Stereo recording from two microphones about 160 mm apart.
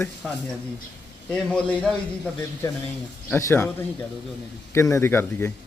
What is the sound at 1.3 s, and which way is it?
A man's voice, 5° left (ahead or behind).